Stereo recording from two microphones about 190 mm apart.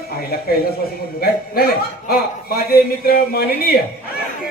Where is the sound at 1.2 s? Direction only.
55° left (ahead or behind).